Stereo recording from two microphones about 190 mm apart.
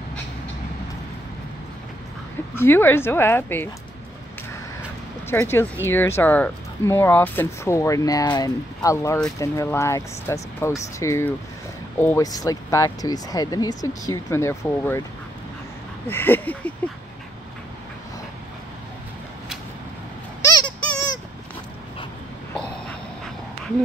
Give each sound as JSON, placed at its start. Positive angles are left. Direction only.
{"t": 2.5, "sound": "speech", "side_deg": 10}
{"t": 5.3, "sound": "speech", "side_deg": 10}
{"t": 16.1, "sound": "speech", "side_deg": 10}
{"t": 20.4, "sound": "music", "side_deg": 20}
{"t": 22.6, "sound": "dog", "side_deg": 5}